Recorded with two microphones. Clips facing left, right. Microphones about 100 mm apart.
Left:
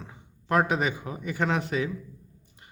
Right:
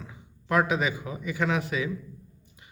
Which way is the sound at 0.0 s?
35° left (ahead or behind).